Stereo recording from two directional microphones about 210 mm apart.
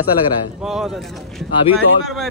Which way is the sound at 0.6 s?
Centre (ahead or behind).